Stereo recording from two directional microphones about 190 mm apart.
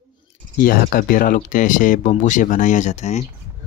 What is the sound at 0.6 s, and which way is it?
Speech, 50° left (ahead or behind).